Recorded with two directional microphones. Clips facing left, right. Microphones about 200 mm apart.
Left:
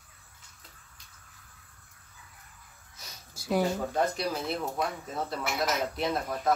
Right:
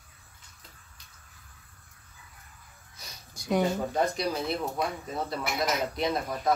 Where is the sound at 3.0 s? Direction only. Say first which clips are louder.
Right 1 dB; 5° left (ahead or behind).